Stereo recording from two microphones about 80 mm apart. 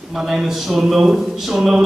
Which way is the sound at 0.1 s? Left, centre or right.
Centre.